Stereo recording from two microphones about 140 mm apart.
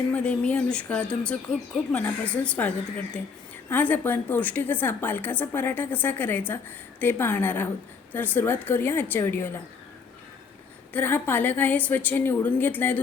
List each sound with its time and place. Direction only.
0.1 s a woman's voice: 10° left (ahead or behind)
10.9 s a woman's voice: 15° left (ahead or behind)